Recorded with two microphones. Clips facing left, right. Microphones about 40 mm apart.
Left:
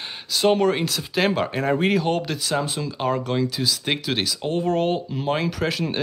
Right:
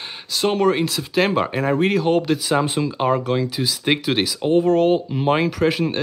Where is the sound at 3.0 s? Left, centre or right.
Centre.